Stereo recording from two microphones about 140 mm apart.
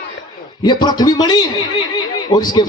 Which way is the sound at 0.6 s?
30° left (ahead or behind).